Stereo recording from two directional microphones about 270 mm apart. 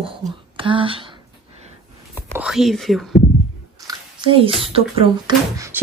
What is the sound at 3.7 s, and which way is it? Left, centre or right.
Speech, centre.